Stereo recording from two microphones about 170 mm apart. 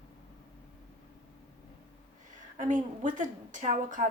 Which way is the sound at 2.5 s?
50° right (ahead or behind).